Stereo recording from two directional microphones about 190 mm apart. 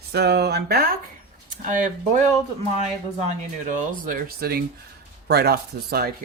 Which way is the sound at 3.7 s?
45° right (ahead or behind).